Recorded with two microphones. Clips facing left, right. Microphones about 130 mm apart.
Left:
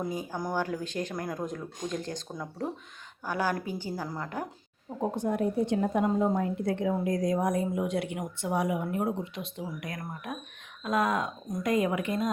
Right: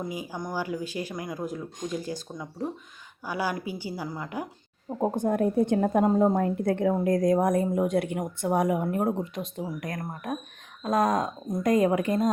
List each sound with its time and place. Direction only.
0.0 s speech: 5° right (ahead or behind)
3.2 s speech: 10° right (ahead or behind)
4.9 s a woman's voice: 50° right (ahead or behind)